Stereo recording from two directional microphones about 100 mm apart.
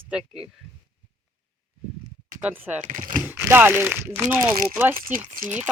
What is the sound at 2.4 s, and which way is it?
Speech, 15° right (ahead or behind).